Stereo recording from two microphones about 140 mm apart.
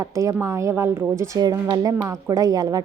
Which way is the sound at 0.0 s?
20° right (ahead or behind).